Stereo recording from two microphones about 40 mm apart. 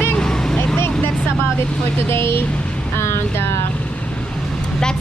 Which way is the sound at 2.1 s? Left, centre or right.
Left.